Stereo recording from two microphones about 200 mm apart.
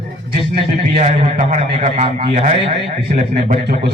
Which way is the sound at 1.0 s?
35° right (ahead or behind).